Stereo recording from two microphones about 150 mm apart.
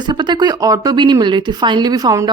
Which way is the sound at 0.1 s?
30° right (ahead or behind).